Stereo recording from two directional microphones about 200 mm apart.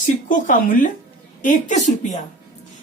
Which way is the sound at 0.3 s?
40° left (ahead or behind).